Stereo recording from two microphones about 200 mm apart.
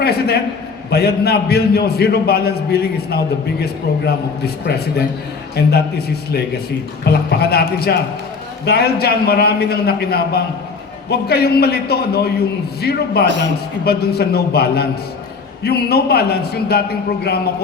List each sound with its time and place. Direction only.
0.0 s a man's voice: 50° left (ahead or behind)
7.0 s a man's voice: 50° left (ahead or behind)